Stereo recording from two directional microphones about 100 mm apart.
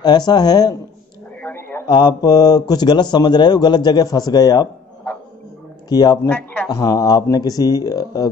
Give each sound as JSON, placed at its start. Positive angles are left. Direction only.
{"t": 0.0, "sound": "a man's voice", "side_deg": 45}
{"t": 1.4, "sound": "a sound", "side_deg": 20}
{"t": 2.0, "sound": "a man's voice", "side_deg": 45}
{"t": 5.9, "sound": "speech", "side_deg": 45}
{"t": 6.2, "sound": "speech", "side_deg": 15}
{"t": 6.7, "sound": "speech", "side_deg": 35}